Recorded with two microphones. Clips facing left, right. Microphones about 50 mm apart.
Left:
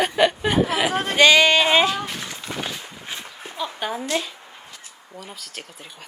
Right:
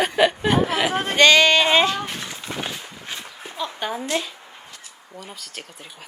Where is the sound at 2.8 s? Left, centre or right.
Centre.